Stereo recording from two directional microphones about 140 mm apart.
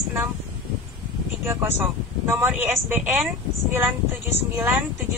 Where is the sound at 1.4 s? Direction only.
15° right (ahead or behind).